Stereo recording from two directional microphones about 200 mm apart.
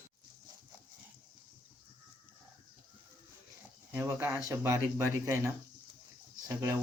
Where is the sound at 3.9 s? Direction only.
15° right (ahead or behind).